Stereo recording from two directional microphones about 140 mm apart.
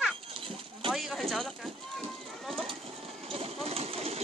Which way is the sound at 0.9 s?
Centre (ahead or behind).